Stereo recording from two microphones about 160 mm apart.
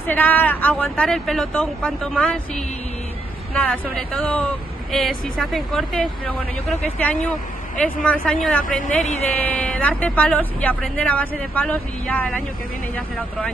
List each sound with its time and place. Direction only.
0.0 s speech: 10° left (ahead or behind)
3.5 s speech: 5° left (ahead or behind)